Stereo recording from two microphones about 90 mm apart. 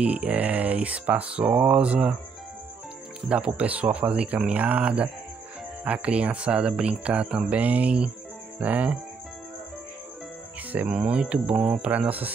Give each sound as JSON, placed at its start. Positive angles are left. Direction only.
{"t": 0.0, "sound": "speech", "side_deg": -15}
{"t": 3.3, "sound": "speech", "side_deg": -15}
{"t": 10.7, "sound": "speech", "side_deg": -15}